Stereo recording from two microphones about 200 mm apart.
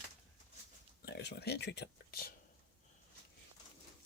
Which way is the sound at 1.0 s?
55° left (ahead or behind).